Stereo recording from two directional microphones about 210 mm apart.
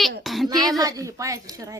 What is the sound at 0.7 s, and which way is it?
A child's voice, 15° right (ahead or behind).